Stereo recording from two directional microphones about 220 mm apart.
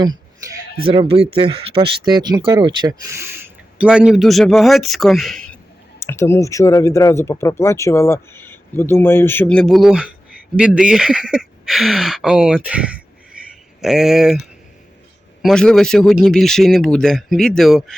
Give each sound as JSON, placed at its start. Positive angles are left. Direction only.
{"t": 0.9, "sound": "a man's voice", "side_deg": -25}